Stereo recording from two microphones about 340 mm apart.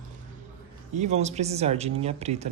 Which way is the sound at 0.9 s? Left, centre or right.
Centre.